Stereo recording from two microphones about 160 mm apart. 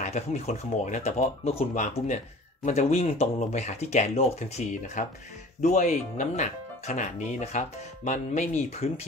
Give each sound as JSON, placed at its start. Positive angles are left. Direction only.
{"t": 0.0, "sound": "speech", "side_deg": 45}